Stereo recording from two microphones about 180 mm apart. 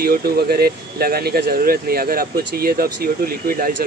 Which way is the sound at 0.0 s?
60° right (ahead or behind).